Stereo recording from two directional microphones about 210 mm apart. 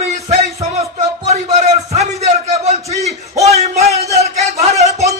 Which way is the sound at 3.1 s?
15° right (ahead or behind).